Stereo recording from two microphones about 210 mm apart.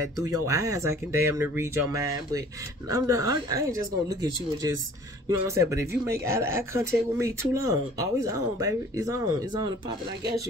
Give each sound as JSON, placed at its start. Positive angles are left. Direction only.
{"t": 0.0, "sound": "speech", "side_deg": -15}
{"t": 2.9, "sound": "speech", "side_deg": -15}